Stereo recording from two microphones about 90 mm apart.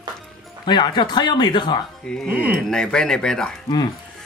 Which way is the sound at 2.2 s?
20° right (ahead or behind).